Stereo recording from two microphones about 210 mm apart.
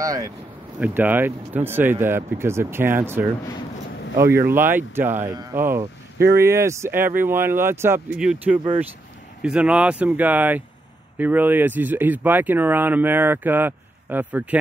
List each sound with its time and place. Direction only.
0.0 s speech: 15° right (ahead or behind)